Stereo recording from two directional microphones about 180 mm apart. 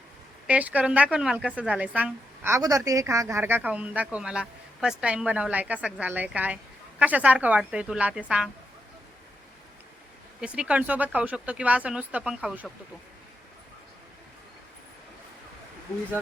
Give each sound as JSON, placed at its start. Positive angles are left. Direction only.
{"t": 0.4, "sound": "a woman's voice", "side_deg": -10}
{"t": 10.4, "sound": "a woman's voice", "side_deg": -5}